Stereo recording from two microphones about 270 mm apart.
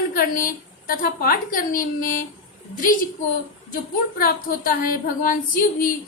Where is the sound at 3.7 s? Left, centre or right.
Left.